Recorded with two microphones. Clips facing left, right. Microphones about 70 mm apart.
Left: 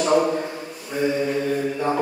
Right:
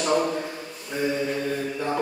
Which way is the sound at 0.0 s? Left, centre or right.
Centre.